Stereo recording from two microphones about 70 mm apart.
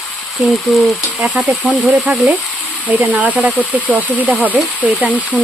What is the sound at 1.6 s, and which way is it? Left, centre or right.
Speech, centre.